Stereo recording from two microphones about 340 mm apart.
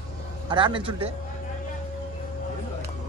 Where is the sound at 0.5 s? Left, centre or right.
Centre.